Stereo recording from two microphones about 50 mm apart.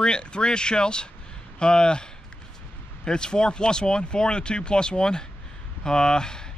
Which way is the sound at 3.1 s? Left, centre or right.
Centre.